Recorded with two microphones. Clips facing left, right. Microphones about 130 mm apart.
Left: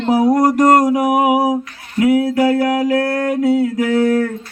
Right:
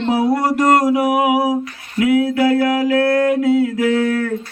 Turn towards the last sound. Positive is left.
turn(degrees=40)  # may be behind; listen again after turning